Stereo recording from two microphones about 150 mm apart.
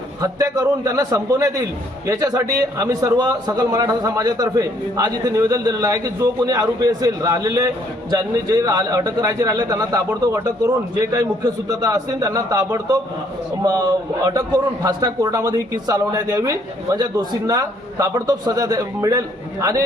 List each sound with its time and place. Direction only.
0.2 s a man's voice: 20° right (ahead or behind)